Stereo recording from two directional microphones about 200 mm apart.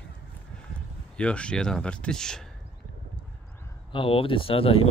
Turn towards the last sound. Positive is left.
turn(degrees=25)  # may be behind; listen again after turning